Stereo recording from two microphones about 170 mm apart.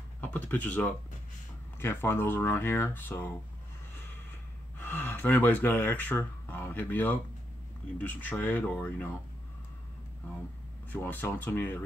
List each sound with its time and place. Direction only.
0.2 s speech: 10° left (ahead or behind)
4.7 s speech: 10° left (ahead or behind)
10.9 s speech: 10° left (ahead or behind)